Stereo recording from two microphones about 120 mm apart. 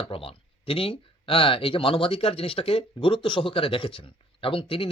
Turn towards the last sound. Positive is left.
turn(degrees=50)  # may be behind; listen again after turning